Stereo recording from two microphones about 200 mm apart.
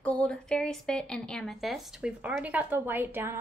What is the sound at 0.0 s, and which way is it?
A woman's voice, 5° left (ahead or behind).